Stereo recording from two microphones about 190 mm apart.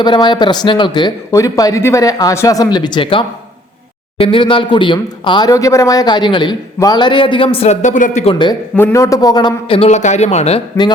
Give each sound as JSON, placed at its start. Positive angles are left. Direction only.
{"t": 0.0, "sound": "speech", "side_deg": 25}
{"t": 8.7, "sound": "speech", "side_deg": 15}